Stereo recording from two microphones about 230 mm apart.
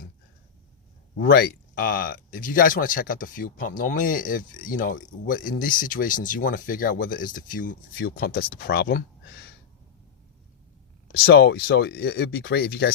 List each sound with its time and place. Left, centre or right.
1.1 s speech: left
11.1 s speech: left